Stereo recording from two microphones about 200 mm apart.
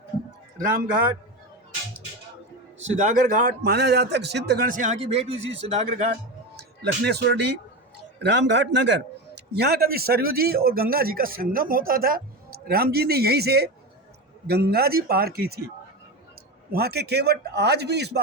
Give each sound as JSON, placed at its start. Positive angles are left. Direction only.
{"t": 0.5, "sound": "a man's voice", "side_deg": -45}
{"t": 2.8, "sound": "a man's voice", "side_deg": -40}
{"t": 5.4, "sound": "speech", "side_deg": -70}
{"t": 5.6, "sound": "speech", "side_deg": -30}
{"t": 6.6, "sound": "a man's voice", "side_deg": -55}
{"t": 16.7, "sound": "speech", "side_deg": -50}